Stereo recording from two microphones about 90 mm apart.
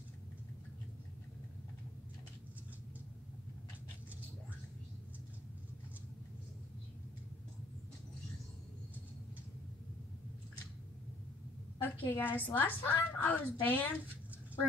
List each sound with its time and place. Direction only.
11.8 s a woman's voice: 20° left (ahead or behind)